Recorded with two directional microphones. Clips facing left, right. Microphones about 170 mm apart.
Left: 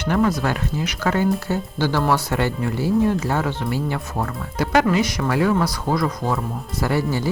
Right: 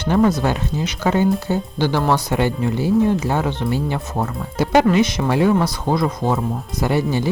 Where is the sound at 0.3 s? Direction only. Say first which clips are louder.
Right 2 dB; 25° right (ahead or behind).